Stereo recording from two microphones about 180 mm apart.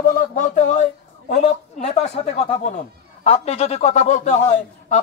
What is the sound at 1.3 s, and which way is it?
Speech, 40° left (ahead or behind).